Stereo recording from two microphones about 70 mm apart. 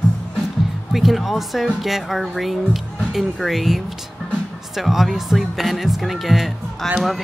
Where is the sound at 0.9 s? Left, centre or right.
Centre.